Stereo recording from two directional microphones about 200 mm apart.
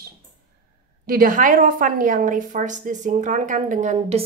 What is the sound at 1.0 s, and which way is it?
A woman's voice, 45° right (ahead or behind).